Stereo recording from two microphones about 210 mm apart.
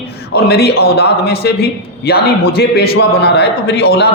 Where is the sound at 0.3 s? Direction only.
50° left (ahead or behind).